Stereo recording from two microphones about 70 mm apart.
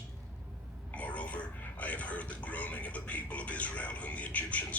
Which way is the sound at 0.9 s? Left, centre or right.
Left.